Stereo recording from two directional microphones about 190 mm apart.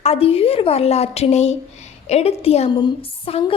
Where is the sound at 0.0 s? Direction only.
30° left (ahead or behind).